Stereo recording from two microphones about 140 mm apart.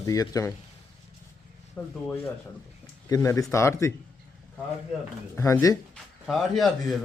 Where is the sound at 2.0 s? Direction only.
15° left (ahead or behind).